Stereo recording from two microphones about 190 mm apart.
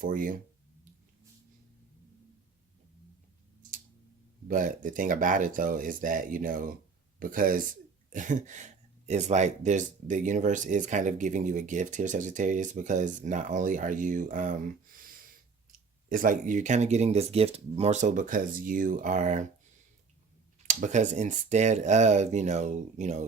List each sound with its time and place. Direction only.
0.0 s speech: 45° right (ahead or behind)
4.4 s speech: 45° right (ahead or behind)
20.7 s speech: 40° right (ahead or behind)